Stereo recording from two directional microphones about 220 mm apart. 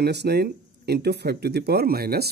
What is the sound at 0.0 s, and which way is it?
Speech, 50° right (ahead or behind).